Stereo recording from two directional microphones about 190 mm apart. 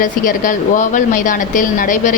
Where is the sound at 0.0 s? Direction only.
45° left (ahead or behind).